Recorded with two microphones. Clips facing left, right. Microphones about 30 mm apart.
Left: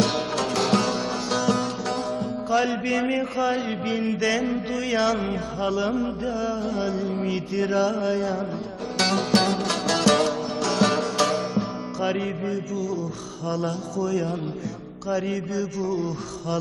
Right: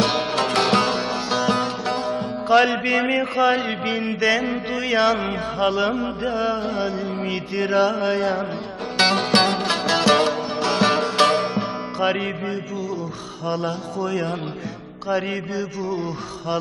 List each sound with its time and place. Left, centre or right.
0.0 s music: right
2.5 s music: right
5.5 s music: right
11.3 s music: right